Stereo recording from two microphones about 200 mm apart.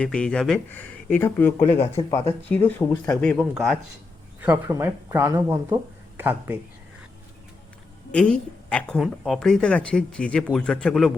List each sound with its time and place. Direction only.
0.0 s a woman's voice: 5° left (ahead or behind)
1.7 s speech: 25° left (ahead or behind)
2.0 s speech: 15° left (ahead or behind)
4.4 s speech: 10° right (ahead or behind)
8.1 s a woman's voice: 5° left (ahead or behind)